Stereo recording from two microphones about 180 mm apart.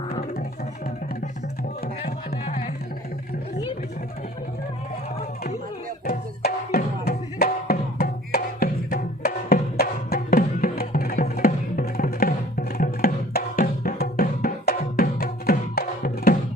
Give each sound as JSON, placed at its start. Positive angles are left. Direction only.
{"t": 2.4, "sound": "music", "side_deg": 40}
{"t": 6.1, "sound": "music", "side_deg": 55}